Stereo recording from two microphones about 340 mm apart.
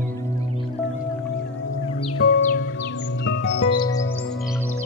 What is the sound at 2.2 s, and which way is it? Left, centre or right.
Music, left.